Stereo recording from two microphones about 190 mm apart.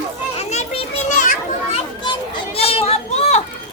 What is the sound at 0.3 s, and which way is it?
Children playing, 35° left (ahead or behind).